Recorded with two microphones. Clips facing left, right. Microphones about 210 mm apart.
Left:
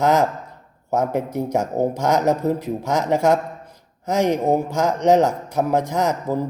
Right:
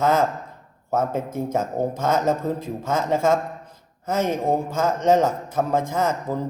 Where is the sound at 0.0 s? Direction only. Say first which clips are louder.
Left 2 dB; 15° left (ahead or behind).